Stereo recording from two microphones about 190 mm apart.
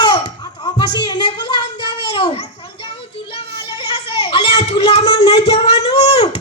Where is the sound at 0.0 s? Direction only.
20° left (ahead or behind).